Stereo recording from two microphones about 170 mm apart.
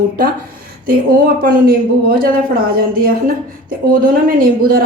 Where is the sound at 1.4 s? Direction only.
60° right (ahead or behind).